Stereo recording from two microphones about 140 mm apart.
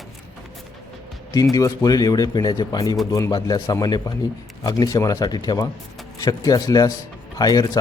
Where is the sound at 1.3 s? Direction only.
25° left (ahead or behind).